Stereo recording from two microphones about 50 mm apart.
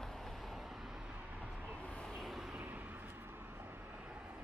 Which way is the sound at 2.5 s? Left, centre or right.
Right.